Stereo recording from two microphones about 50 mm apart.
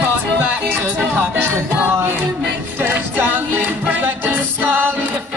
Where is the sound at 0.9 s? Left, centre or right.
Right.